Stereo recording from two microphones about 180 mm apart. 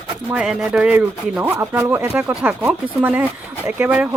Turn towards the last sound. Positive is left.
turn(degrees=-10)  # may be behind; listen again after turning